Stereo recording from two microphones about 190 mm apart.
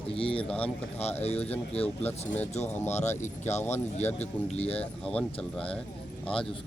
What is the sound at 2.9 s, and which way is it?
Speech, 35° left (ahead or behind).